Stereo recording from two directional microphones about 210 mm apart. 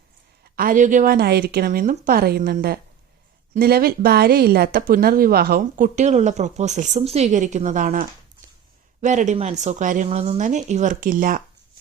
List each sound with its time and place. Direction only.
0.5 s a woman's voice: 40° right (ahead or behind)